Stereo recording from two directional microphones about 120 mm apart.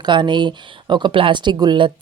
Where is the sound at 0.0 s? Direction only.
40° right (ahead or behind).